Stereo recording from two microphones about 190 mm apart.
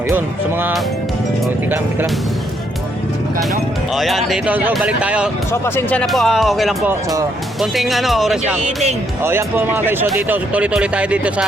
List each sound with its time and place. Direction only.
3.9 s speech: centre (ahead or behind)
5.5 s speech: 10° left (ahead or behind)
8.6 s speech: 35° right (ahead or behind)
9.2 s speech: 10° right (ahead or behind)